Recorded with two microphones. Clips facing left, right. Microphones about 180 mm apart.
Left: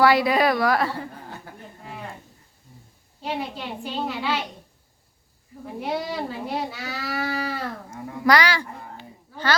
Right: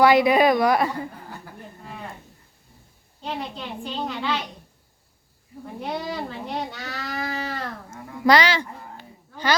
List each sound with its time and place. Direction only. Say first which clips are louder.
0.0 s a woman's voice: right 2 dB; 20° right (ahead or behind)
3.2 s speech: left 2 dB; 5° left (ahead or behind)
5.8 s speech: left 2 dB; 5° left (ahead or behind)
8.2 s a woman's voice: right 2 dB; 25° right (ahead or behind)